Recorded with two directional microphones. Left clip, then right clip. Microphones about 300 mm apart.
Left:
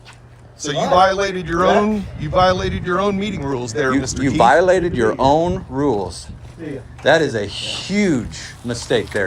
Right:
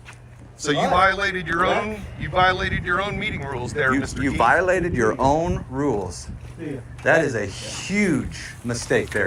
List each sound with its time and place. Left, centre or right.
0.6 s speech: centre
7.3 s speech: centre